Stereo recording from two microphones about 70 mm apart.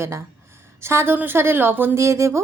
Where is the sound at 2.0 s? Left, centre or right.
Right.